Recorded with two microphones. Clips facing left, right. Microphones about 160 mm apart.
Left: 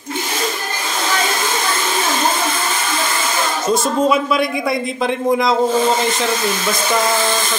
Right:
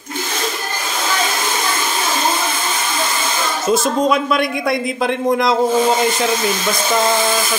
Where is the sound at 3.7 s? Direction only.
Centre (ahead or behind).